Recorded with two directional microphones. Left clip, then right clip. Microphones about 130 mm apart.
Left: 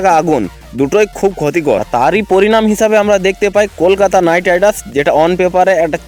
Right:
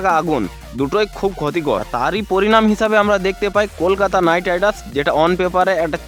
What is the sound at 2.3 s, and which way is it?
Speech, 20° left (ahead or behind).